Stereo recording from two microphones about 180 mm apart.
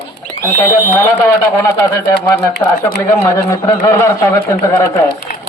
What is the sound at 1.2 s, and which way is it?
A man's voice, 15° left (ahead or behind).